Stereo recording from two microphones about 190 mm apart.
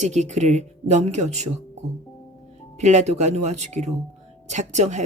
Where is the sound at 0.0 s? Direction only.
40° right (ahead or behind).